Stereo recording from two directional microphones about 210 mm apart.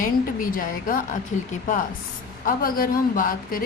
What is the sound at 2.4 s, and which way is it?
A woman's voice, 45° left (ahead or behind).